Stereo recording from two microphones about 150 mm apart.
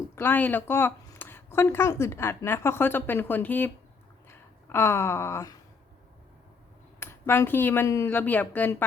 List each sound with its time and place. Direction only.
0.2 s a woman's voice: 10° left (ahead or behind)
4.3 s a sound: 15° left (ahead or behind)
7.0 s a woman's voice: 15° left (ahead or behind)